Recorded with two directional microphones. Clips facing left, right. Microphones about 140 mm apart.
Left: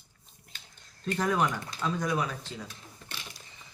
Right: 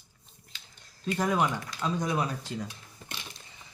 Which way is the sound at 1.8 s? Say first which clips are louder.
Even; 20° right (ahead or behind).